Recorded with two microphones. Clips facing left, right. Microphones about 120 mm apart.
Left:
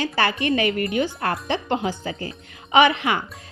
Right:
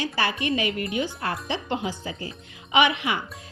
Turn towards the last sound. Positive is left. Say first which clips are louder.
# left 5 dB
turn(degrees=50)  # may be behind; listen again after turning